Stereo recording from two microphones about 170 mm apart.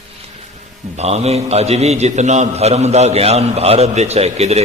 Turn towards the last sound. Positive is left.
turn(degrees=-40)  # may be behind; listen again after turning